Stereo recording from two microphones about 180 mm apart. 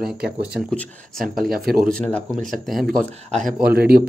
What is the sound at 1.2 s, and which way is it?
Speech, 55° right (ahead or behind).